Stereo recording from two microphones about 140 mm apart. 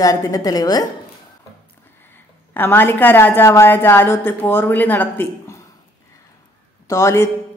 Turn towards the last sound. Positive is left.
turn(degrees=20)  # may be behind; listen again after turning